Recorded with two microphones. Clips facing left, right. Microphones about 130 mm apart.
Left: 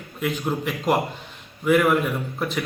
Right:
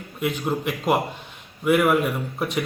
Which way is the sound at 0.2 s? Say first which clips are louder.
Right 1 dB; 5° right (ahead or behind).